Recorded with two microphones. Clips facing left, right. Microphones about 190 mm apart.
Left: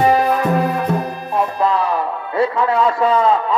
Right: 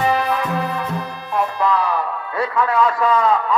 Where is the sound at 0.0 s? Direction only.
45° left (ahead or behind).